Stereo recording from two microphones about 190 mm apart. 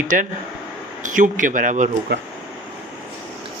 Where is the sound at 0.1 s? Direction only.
45° right (ahead or behind).